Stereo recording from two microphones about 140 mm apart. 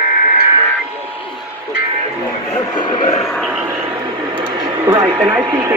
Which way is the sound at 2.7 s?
35° left (ahead or behind).